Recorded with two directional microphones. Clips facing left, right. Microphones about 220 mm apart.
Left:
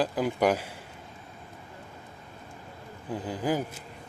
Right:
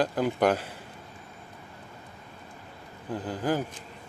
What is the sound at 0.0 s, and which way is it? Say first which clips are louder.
Speech: right 1 dB; 5° left (ahead or behind).